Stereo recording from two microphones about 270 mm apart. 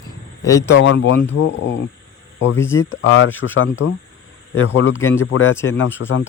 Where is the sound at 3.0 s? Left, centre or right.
Left.